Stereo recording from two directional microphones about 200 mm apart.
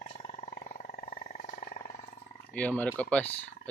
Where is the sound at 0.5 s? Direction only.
40° left (ahead or behind).